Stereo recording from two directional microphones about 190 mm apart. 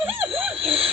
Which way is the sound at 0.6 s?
30° right (ahead or behind).